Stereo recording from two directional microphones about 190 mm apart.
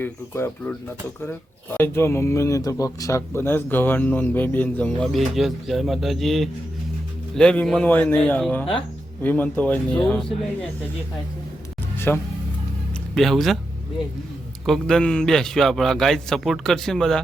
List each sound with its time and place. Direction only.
0.0 s speech: 10° left (ahead or behind)
11.9 s music: 10° left (ahead or behind)
13.1 s a man's voice: centre (ahead or behind)
14.6 s a man's voice: centre (ahead or behind)